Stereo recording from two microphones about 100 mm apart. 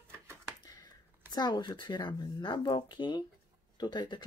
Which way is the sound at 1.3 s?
45° left (ahead or behind).